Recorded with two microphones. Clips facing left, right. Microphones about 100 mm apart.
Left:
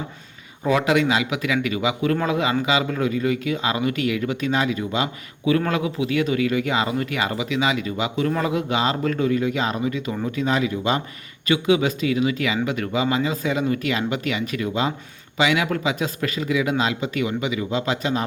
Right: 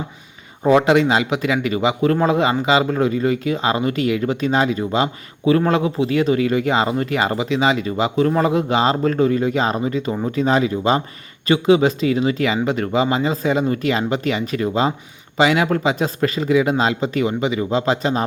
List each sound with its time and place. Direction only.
0.6 s a man's voice: 35° right (ahead or behind)